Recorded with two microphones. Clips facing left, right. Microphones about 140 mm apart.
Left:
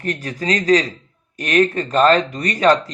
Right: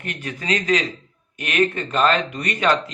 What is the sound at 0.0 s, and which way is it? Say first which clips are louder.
Speech: left 6 dB; 35° left (ahead or behind).